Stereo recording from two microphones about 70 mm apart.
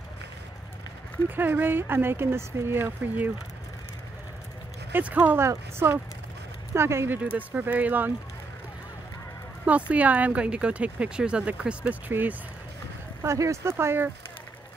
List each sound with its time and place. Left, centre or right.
1.3 s speech: right
4.9 s speech: right
5.4 s speech: right
7.3 s speech: right
9.7 s speech: centre
13.2 s speech: right